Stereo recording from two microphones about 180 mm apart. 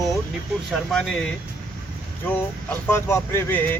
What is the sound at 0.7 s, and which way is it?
Speech, centre (ahead or behind).